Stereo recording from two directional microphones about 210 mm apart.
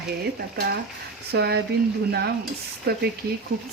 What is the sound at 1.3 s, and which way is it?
Speech, 50° right (ahead or behind).